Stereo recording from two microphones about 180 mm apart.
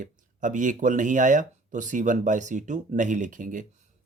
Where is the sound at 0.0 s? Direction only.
45° right (ahead or behind).